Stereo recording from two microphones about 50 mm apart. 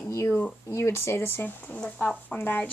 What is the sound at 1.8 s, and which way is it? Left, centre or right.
Speech, centre.